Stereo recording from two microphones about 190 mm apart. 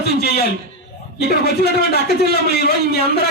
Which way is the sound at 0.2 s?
55° left (ahead or behind).